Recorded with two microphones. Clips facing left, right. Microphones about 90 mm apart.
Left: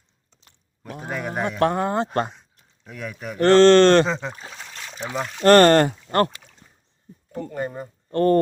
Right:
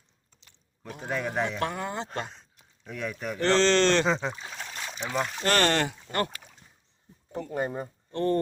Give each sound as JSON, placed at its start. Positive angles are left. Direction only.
{"t": 1.1, "sound": "speech", "side_deg": 10}
{"t": 1.5, "sound": "speech", "side_deg": 50}
{"t": 2.8, "sound": "speech", "side_deg": 5}
{"t": 3.3, "sound": "speech", "side_deg": 50}
{"t": 4.0, "sound": "speech", "side_deg": 0}
{"t": 4.7, "sound": "trickle", "side_deg": -15}
{"t": 5.1, "sound": "speech", "side_deg": 0}
{"t": 5.4, "sound": "speech", "side_deg": 50}
{"t": 7.5, "sound": "speech", "side_deg": -15}
{"t": 8.1, "sound": "speech", "side_deg": 55}